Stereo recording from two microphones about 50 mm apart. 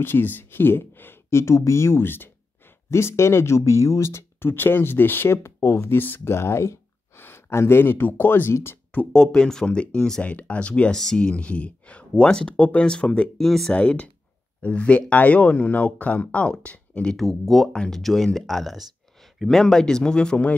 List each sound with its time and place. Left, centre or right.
0.0 s speech: left
1.3 s speech: left
2.9 s speech: left
4.4 s speech: left
5.3 s speech: left
7.2 s speech: left
9.1 s speech: centre
10.2 s speech: left
10.9 s speech: centre
11.1 s speech: left
13.4 s speech: centre
13.7 s speech: left
17.2 s speech: centre; by 20.5 s left